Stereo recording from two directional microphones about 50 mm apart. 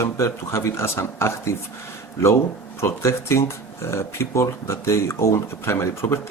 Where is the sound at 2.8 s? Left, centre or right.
Left.